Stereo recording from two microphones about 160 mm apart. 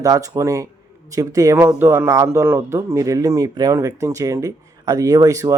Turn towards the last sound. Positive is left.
turn(degrees=-20)  # may be behind; listen again after turning